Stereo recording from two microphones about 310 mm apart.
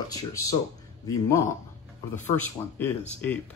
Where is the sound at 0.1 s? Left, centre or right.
Centre.